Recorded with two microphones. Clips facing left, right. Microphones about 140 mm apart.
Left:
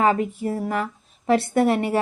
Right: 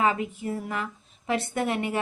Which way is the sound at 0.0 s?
40° left (ahead or behind).